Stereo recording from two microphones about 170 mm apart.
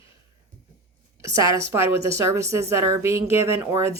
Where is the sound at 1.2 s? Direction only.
20° right (ahead or behind).